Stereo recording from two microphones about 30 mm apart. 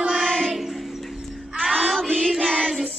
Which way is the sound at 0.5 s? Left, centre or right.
Centre.